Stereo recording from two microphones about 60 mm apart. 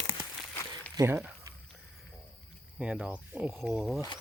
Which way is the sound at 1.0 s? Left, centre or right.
Right.